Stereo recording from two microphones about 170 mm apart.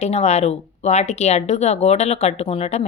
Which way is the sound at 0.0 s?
40° left (ahead or behind).